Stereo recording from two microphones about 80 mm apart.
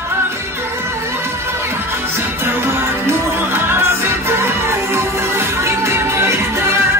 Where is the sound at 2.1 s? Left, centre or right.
Right.